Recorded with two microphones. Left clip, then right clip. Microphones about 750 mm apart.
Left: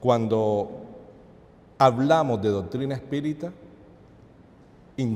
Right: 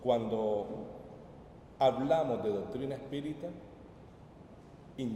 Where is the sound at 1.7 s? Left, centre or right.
Left.